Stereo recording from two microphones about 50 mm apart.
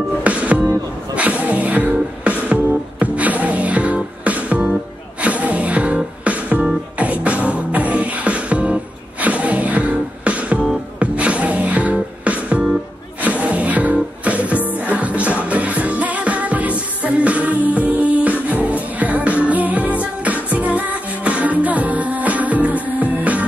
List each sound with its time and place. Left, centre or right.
0.2 s music: right